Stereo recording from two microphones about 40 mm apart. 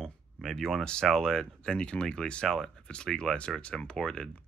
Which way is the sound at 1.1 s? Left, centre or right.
Centre.